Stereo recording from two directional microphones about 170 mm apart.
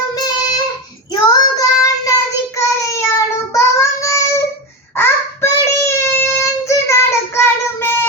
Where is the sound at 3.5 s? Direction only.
20° left (ahead or behind).